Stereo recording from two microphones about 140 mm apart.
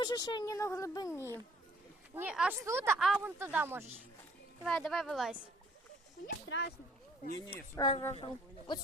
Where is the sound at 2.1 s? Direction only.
10° right (ahead or behind).